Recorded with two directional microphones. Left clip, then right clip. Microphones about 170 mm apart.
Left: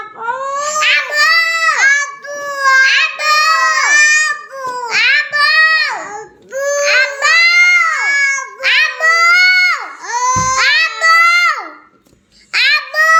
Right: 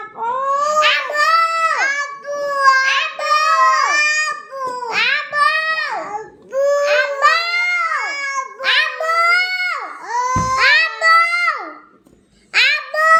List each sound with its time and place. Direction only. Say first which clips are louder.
0.6 s babbling: left 3 dB; 10° left (ahead or behind)
1.1 s baby cry: left 3 dB; 10° left (ahead or behind)
1.7 s babbling: left 7 dB; 25° left (ahead or behind)
2.8 s a sound: left 6 dB; 10° left (ahead or behind)
3.8 s crying: left 6 dB; 30° left (ahead or behind)
4.9 s child singing: left 6 dB; 10° left (ahead or behind)
5.9 s babbling: left 1 dB; 25° left (ahead or behind)
6.8 s babbling: left 4 dB; 10° left (ahead or behind)
7.2 s a sound: left 6 dB; 10° left (ahead or behind)
7.9 s cat: left 8 dB; 25° left (ahead or behind)
8.6 s baby cry: left 5 dB; 10° left (ahead or behind)
10.6 s music: right 1 dB; 5° right (ahead or behind)
11.0 s child singing: left 7 dB; centre (ahead or behind)
12.5 s a sound: left 3 dB; centre (ahead or behind)